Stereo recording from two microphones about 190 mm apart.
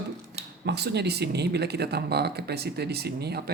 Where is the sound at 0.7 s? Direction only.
60° right (ahead or behind).